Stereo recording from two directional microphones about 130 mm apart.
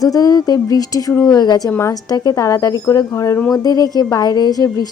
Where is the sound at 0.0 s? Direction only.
30° left (ahead or behind).